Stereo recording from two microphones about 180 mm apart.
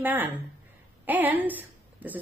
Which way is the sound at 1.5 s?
10° right (ahead or behind).